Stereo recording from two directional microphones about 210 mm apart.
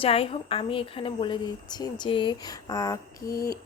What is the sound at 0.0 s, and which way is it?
A woman's voice, 25° left (ahead or behind).